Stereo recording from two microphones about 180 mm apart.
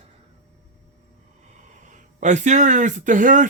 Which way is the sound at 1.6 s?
45° right (ahead or behind).